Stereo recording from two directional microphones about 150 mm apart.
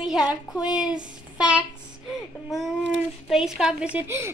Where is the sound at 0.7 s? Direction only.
5° right (ahead or behind).